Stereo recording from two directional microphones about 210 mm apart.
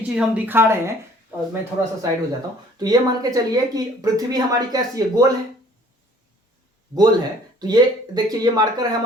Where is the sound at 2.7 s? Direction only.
20° right (ahead or behind).